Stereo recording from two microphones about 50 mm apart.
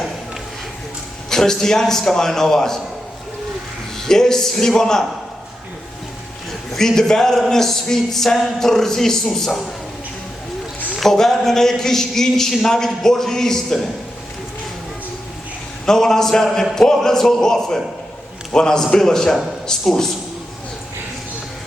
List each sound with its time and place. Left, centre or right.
1.3 s a man's voice: centre
3.9 s a man's voice: centre
6.7 s a man's voice: centre
11.0 s a man's voice: centre
15.9 s a man's voice: centre